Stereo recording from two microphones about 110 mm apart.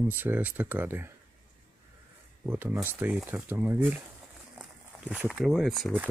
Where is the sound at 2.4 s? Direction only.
20° right (ahead or behind).